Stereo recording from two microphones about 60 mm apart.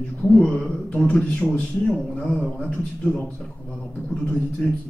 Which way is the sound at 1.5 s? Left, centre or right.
Centre.